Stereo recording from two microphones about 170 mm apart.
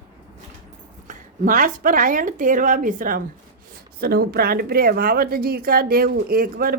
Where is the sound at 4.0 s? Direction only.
65° right (ahead or behind).